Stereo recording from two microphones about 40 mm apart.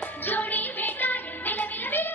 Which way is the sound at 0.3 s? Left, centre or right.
Left.